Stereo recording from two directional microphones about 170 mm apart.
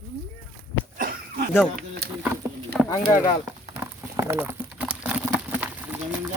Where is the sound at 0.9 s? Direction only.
60° right (ahead or behind).